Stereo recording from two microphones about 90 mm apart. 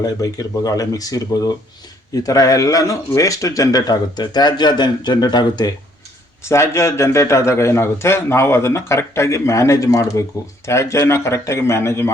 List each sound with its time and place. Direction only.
0.0 s a man's voice: 40° left (ahead or behind)
6.4 s a man's voice: 30° left (ahead or behind)